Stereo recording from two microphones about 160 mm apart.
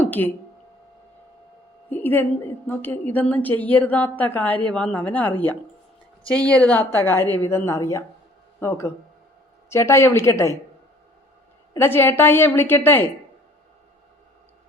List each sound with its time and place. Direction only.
0.0 s speech: 10° left (ahead or behind)
1.9 s a sound: 10° left (ahead or behind)
2.6 s a woman's voice: 10° left (ahead or behind)
9.6 s a woman's voice: 15° left (ahead or behind)
11.7 s a woman's voice: 15° left (ahead or behind)